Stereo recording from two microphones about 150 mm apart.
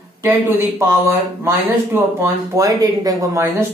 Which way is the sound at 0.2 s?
15° right (ahead or behind).